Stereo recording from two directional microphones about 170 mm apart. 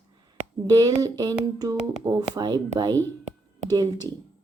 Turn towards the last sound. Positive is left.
turn(degrees=-25)  # may be behind; listen again after turning